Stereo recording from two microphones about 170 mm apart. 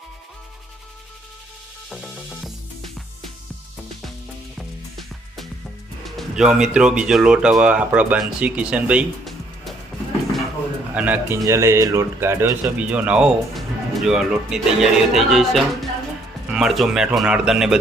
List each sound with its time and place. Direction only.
2.0 s speech: centre (ahead or behind)
4.5 s music: centre (ahead or behind)
6.1 s speech: centre (ahead or behind)
10.9 s speech: 10° right (ahead or behind)